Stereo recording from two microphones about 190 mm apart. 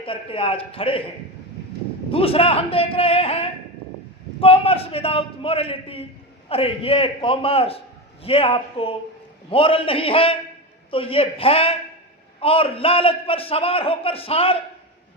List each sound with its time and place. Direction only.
0.0 s a man's voice: 30° left (ahead or behind)
2.0 s a man's voice: 30° left (ahead or behind)